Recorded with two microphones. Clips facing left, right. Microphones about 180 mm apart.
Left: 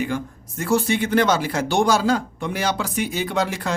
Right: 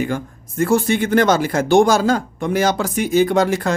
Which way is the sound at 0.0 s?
50° right (ahead or behind).